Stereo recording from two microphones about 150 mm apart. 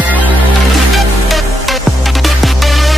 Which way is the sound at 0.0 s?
10° right (ahead or behind).